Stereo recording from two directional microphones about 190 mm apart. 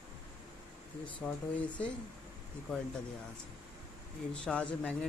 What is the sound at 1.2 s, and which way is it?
Speech, 5° left (ahead or behind).